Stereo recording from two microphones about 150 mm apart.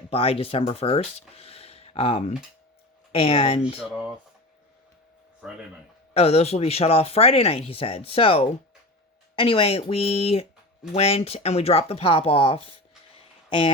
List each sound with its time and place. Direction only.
0.1 s speech: 40° left (ahead or behind)
1.4 s a sound: 40° left (ahead or behind)
3.1 s speech: 40° left (ahead or behind)
5.4 s speech: 5° right (ahead or behind)
6.1 s speech: 45° left (ahead or behind)